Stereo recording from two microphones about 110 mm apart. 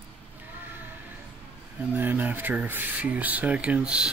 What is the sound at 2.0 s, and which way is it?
Speech, 15° right (ahead or behind).